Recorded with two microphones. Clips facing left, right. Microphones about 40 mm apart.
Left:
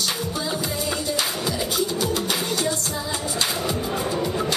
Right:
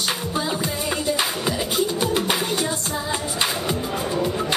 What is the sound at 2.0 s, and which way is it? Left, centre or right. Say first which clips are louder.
Music: right 2 dB; right.